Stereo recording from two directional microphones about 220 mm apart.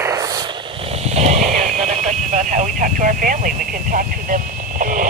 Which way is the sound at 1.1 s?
30° right (ahead or behind).